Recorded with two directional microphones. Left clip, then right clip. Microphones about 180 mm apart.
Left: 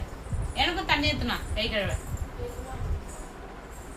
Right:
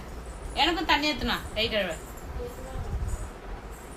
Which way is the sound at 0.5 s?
35° right (ahead or behind).